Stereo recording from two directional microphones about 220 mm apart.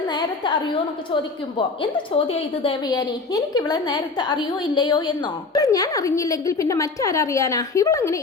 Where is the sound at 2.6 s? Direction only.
15° left (ahead or behind).